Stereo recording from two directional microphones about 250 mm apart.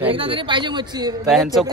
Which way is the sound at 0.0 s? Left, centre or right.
Right.